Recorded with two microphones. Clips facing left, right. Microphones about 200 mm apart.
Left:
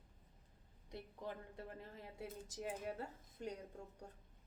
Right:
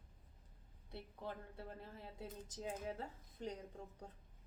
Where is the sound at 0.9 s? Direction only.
15° left (ahead or behind).